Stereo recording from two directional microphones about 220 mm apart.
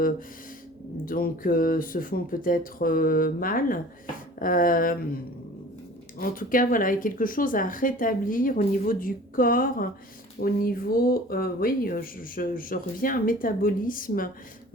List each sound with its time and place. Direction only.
1.0 s speech: 40° left (ahead or behind)
6.1 s speech: 40° left (ahead or behind)